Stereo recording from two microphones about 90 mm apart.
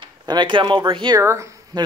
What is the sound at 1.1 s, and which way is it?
Speech, 35° right (ahead or behind).